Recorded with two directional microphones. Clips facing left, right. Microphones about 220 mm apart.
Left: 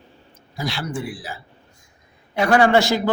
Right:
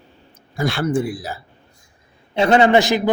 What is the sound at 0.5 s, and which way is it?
Speech, 50° right (ahead or behind).